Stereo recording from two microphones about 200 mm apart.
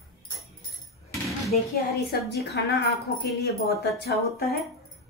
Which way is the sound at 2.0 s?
55° left (ahead or behind).